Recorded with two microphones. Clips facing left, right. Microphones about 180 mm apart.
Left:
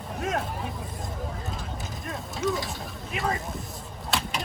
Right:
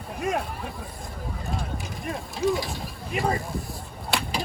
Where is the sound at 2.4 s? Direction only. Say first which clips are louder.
Right 4 dB; 35° right (ahead or behind).